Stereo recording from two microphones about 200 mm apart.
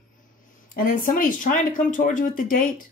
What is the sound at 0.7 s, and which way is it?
A woman's voice, 45° left (ahead or behind).